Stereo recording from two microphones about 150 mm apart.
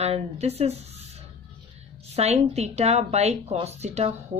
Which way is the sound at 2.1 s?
45° right (ahead or behind).